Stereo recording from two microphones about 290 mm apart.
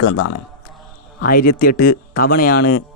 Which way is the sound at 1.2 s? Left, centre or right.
Left.